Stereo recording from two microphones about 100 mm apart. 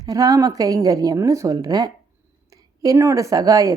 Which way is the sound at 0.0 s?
35° right (ahead or behind).